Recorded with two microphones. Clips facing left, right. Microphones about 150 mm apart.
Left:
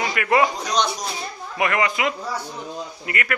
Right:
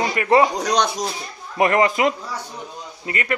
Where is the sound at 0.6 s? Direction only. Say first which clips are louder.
Right 3 dB; 70° right (ahead or behind).